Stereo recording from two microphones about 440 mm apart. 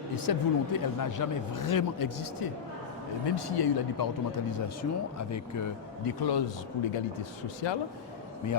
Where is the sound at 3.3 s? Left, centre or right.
Left.